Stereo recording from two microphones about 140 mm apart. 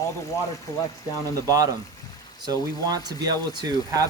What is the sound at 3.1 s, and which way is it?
Speech, 30° right (ahead or behind).